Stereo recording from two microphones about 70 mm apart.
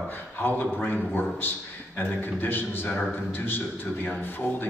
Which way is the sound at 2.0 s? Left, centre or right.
Left.